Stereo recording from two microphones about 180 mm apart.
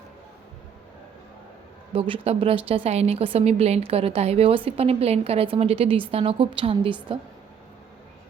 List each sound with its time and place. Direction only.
1.9 s a woman's voice: 30° right (ahead or behind)